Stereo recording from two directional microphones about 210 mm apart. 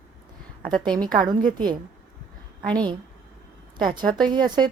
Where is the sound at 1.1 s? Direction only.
20° right (ahead or behind).